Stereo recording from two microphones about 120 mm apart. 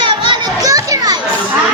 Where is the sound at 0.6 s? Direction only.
30° right (ahead or behind).